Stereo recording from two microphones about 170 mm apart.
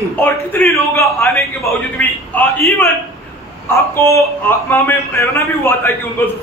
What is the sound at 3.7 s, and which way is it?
A man's voice, 15° left (ahead or behind).